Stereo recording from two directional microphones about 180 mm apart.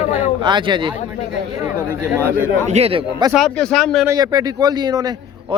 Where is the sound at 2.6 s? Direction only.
35° right (ahead or behind).